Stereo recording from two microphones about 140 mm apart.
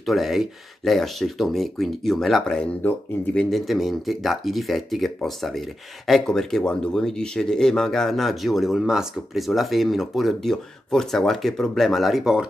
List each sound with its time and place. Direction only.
0.0 s speech: centre (ahead or behind)